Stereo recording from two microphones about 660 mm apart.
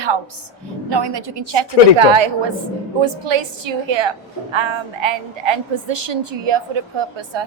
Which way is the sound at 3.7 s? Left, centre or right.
Right.